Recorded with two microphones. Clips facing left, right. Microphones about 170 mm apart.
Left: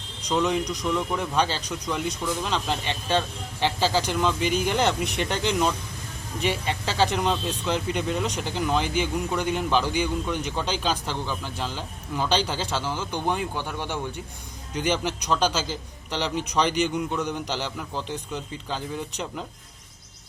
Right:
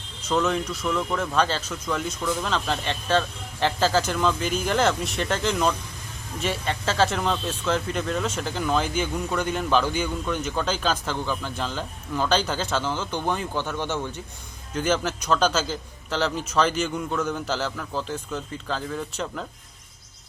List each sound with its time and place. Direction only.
0.2 s a man's voice: 15° left (ahead or behind)
7.0 s a man's voice: 15° left (ahead or behind)